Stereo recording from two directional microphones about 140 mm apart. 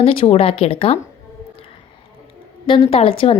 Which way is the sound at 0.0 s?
45° left (ahead or behind).